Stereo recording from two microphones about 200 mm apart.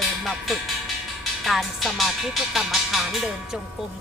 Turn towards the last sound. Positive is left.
turn(degrees=0)  # may be behind; listen again after turning